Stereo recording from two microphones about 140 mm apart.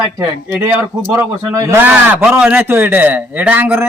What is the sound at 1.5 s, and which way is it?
Speech, 25° right (ahead or behind).